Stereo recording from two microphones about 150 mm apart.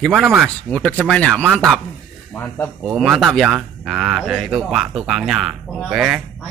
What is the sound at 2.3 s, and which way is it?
Speech, 10° left (ahead or behind).